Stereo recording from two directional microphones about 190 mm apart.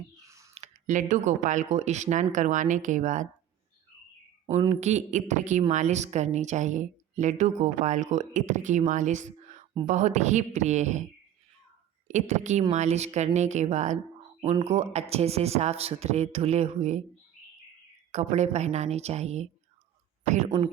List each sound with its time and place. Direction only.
0.5 s a woman's voice: 40° right (ahead or behind)
4.7 s a woman's voice: 35° right (ahead or behind)
12.0 s a woman's voice: 40° right (ahead or behind)
18.1 s a woman's voice: 35° right (ahead or behind)